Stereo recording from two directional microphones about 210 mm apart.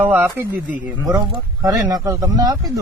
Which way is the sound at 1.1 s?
20° right (ahead or behind).